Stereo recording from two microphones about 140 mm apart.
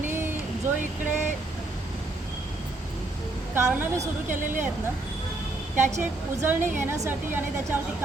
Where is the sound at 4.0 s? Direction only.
65° right (ahead or behind).